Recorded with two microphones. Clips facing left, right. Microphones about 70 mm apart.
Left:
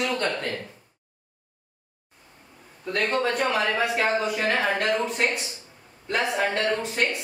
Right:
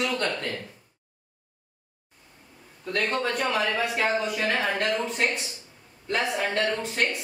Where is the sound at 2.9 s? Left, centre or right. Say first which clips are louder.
Left 2 dB; centre.